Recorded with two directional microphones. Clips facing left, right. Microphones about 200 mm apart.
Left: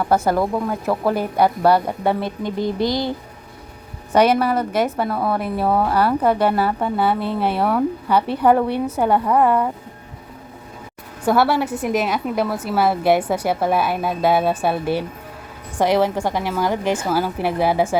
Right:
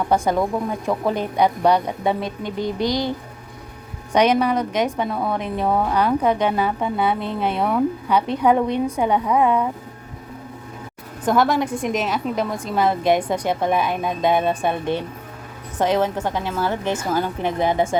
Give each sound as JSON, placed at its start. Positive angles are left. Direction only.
{"t": 0.1, "sound": "a woman's voice", "side_deg": 5}
{"t": 2.6, "sound": "speech", "side_deg": -15}
{"t": 4.1, "sound": "a woman's voice", "side_deg": 5}
{"t": 9.2, "sound": "speech", "side_deg": -10}
{"t": 11.3, "sound": "a woman's voice", "side_deg": 10}